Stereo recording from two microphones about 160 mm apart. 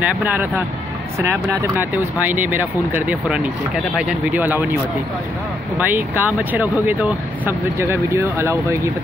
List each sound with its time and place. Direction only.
0.0 s speech: 10° right (ahead or behind)
5.8 s speech: 10° right (ahead or behind)